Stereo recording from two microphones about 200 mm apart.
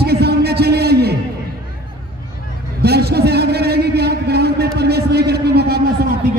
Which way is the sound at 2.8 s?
55° right (ahead or behind).